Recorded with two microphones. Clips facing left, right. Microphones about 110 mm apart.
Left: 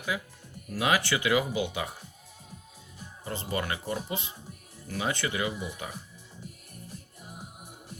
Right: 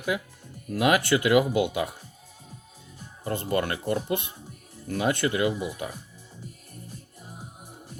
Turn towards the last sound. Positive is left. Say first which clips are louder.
# right 1 dB
turn(degrees=5)  # may be behind; listen again after turning